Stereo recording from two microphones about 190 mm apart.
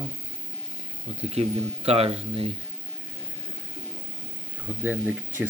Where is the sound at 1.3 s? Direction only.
35° right (ahead or behind).